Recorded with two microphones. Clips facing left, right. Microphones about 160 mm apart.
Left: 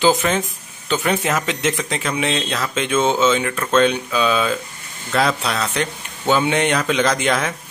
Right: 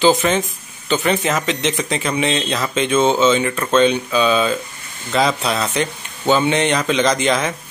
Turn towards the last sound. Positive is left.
turn(degrees=0)  # may be behind; listen again after turning